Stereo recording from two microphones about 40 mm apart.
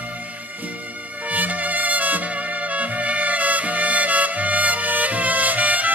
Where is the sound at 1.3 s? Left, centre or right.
Right.